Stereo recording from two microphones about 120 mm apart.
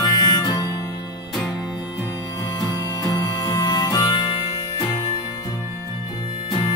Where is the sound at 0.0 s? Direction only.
30° left (ahead or behind).